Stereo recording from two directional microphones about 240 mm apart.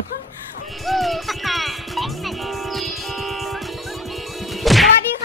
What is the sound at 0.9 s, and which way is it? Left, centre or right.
Music, centre.